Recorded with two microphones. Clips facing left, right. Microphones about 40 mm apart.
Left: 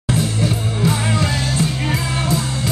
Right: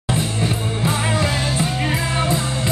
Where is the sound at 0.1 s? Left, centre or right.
Centre.